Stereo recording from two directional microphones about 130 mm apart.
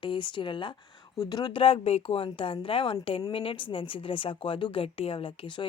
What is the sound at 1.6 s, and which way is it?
A woman's voice, 50° left (ahead or behind).